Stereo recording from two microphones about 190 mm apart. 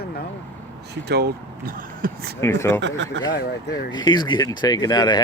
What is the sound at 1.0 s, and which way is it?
Speech, 55° right (ahead or behind).